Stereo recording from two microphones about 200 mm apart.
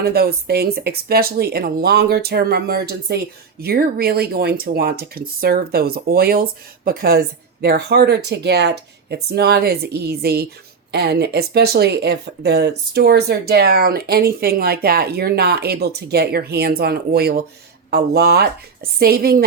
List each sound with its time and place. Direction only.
0.0 s speech: 50° right (ahead or behind)